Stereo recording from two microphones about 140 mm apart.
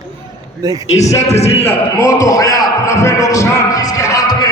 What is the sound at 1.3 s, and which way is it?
Speech, 50° left (ahead or behind).